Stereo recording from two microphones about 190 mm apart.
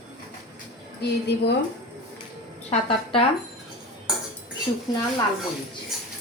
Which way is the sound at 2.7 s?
30° left (ahead or behind).